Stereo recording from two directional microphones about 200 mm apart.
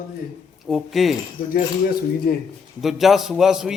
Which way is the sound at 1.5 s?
50° left (ahead or behind).